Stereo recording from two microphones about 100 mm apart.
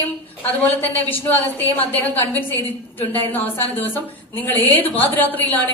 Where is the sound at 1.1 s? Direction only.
20° left (ahead or behind).